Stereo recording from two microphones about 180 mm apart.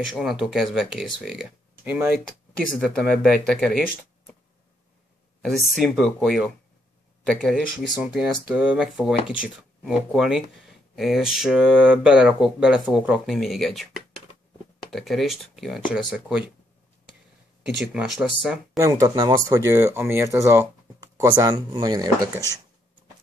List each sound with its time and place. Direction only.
0.0 s speech: centre (ahead or behind)
5.4 s speech: centre (ahead or behind)
17.6 s speech: 5° right (ahead or behind)
18.8 s speech: 20° right (ahead or behind)